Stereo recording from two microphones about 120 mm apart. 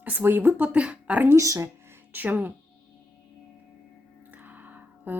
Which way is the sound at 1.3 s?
25° right (ahead or behind).